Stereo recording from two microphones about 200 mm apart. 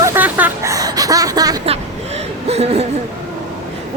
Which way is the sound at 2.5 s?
30° right (ahead or behind).